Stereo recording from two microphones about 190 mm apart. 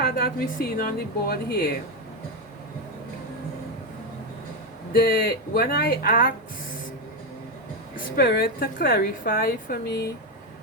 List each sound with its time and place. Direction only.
0.0 s a woman's voice: 50° left (ahead or behind)
4.9 s a woman's voice: 50° left (ahead or behind)
7.9 s a woman's voice: 55° left (ahead or behind)